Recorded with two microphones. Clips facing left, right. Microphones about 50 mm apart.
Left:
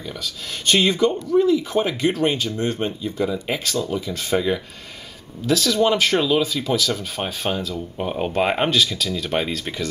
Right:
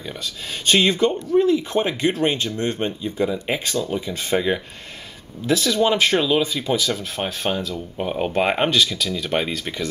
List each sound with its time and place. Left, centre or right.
0.7 s speech: centre
2.1 s speech: centre